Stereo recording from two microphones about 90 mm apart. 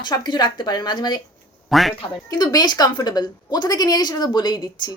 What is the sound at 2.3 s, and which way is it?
A woman's voice, 50° left (ahead or behind).